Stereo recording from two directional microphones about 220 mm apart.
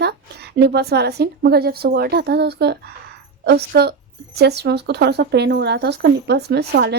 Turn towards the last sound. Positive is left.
turn(degrees=-45)  # may be behind; listen again after turning